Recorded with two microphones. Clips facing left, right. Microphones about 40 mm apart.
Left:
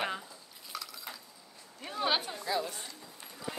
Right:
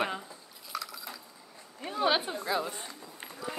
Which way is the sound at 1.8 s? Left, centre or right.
Centre.